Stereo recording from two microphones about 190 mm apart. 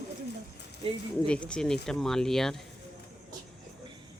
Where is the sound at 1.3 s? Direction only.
5° left (ahead or behind).